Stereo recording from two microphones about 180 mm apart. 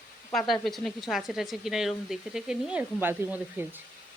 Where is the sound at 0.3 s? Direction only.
Centre (ahead or behind).